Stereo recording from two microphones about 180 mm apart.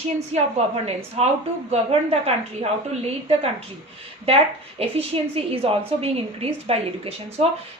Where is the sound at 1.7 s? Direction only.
35° right (ahead or behind).